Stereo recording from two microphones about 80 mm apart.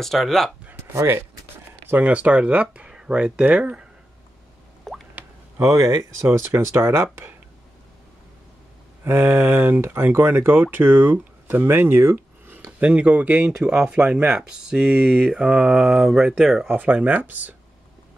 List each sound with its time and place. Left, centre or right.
0.0 s speech: centre
0.9 s speech: right
1.9 s speech: centre
4.9 s drip: centre
5.6 s speech: right
6.3 s speech: right
9.0 s speech: right
12.7 s speech: centre
16.6 s speech: right